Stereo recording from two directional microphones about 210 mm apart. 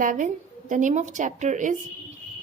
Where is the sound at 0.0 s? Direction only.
40° right (ahead or behind).